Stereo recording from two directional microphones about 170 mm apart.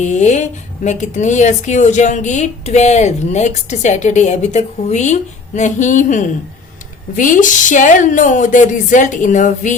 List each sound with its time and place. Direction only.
0.0 s speech: 45° left (ahead or behind)